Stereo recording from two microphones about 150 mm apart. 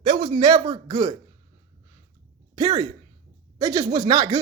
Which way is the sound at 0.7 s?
25° right (ahead or behind).